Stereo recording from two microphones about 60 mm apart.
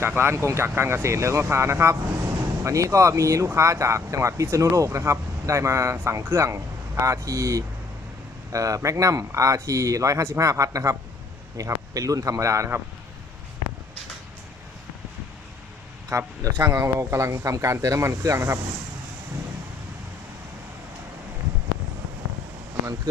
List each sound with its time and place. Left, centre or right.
0.0 s speech: right
7.0 s speech: right
16.0 s speech: right
18.3 s speech: right